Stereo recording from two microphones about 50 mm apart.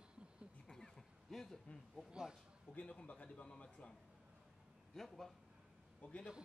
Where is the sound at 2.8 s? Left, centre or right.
Left.